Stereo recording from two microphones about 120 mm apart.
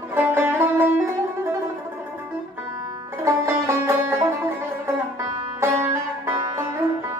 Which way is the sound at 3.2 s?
25° right (ahead or behind).